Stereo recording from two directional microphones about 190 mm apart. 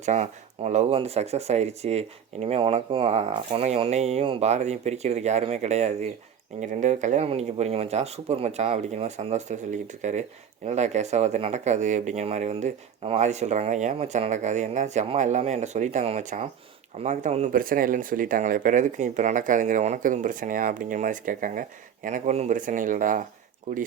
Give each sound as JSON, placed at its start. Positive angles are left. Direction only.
{"t": 0.0, "sound": "speech", "side_deg": -40}